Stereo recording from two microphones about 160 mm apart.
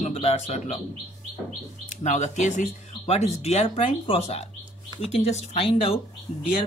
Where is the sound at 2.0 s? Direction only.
45° left (ahead or behind).